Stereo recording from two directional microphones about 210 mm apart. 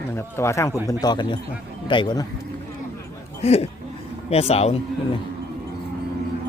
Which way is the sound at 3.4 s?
30° left (ahead or behind).